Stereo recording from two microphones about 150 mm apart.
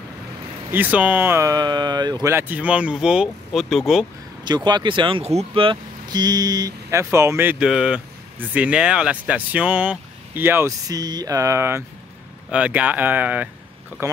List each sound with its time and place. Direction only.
0.7 s speech: 10° right (ahead or behind); by 2.3 s 25° right (ahead or behind)
2.3 s speech: 10° right (ahead or behind)
4.5 s speech: 30° right (ahead or behind)
12.4 s speech: 10° right (ahead or behind)